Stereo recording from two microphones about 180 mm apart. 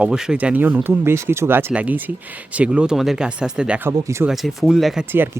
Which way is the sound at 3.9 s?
15° right (ahead or behind).